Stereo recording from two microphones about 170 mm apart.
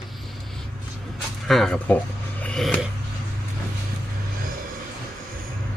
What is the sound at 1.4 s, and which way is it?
Speech, centre (ahead or behind).